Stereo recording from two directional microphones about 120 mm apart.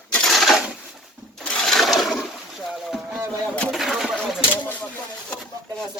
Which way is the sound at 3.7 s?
Centre (ahead or behind).